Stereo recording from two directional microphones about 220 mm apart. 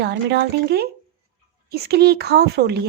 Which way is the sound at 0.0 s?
50° right (ahead or behind).